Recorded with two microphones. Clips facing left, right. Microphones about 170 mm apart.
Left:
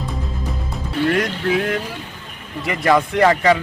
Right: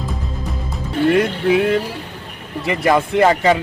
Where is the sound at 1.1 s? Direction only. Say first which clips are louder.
Right 4 dB; 10° right (ahead or behind).